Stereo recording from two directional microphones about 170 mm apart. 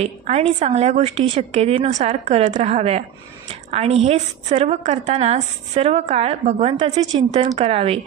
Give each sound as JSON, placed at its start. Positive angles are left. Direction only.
{"t": 0.0, "sound": "a woman's voice", "side_deg": -40}
{"t": 7.1, "sound": "a woman's voice", "side_deg": -25}